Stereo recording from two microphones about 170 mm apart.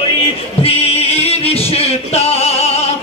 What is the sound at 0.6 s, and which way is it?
Music, 35° left (ahead or behind).